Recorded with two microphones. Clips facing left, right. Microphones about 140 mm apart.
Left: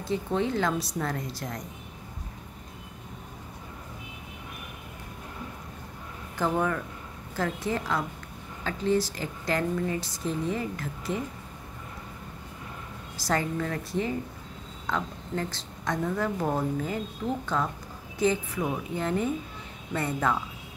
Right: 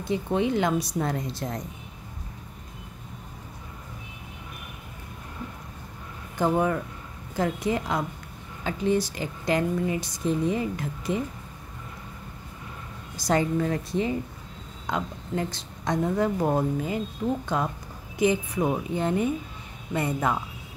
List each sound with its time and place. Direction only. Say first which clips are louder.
0.0 s speech: right 2 dB; 15° right (ahead or behind)
6.3 s speech: right 3 dB; 15° right (ahead or behind)
13.2 s speech: right 4 dB; 20° right (ahead or behind)